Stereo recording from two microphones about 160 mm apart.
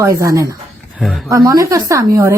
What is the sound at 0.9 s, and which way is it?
Speech, centre (ahead or behind).